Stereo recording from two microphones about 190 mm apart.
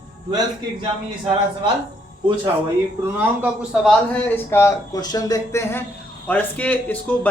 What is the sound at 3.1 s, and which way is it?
A man's voice, 5° right (ahead or behind).